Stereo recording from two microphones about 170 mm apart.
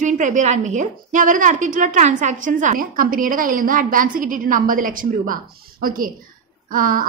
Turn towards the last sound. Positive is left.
turn(degrees=-55)  # may be behind; listen again after turning